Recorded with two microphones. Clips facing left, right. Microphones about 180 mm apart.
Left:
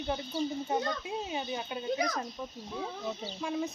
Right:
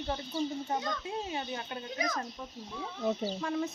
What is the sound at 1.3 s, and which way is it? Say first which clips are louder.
Speech: left 2 dB; 10° left (ahead or behind).